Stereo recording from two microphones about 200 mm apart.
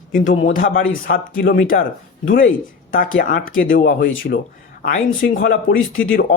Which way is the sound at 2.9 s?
45° left (ahead or behind).